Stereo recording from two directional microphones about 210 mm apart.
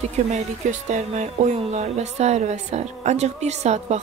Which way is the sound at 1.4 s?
30° right (ahead or behind).